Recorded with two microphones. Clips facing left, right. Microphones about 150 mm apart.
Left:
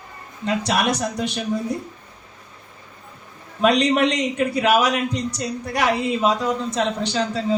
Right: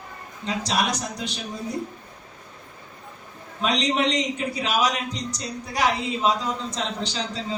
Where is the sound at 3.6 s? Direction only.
55° left (ahead or behind).